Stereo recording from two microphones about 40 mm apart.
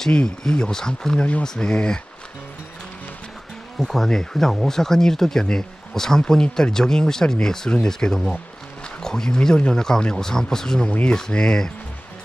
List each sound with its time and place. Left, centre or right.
0.4 s speech: centre
1.7 s speech: left
3.8 s speech: centre